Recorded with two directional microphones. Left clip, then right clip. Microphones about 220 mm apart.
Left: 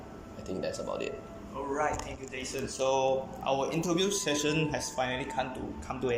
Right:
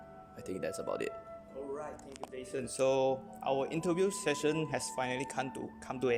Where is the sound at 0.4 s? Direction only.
40° right (ahead or behind).